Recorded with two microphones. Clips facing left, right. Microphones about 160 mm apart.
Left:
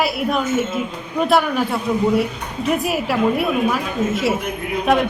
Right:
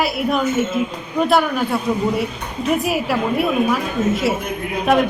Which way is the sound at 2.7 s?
Centre (ahead or behind).